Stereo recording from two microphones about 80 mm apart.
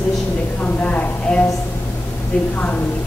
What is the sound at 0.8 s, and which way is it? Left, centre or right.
Speech, centre.